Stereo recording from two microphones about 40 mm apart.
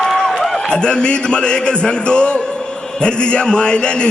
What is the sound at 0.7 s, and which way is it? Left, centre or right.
A man's voice, left.